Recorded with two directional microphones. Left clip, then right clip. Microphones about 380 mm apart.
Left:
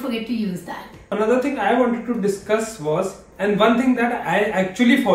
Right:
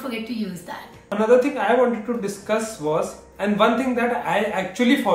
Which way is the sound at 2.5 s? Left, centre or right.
Centre.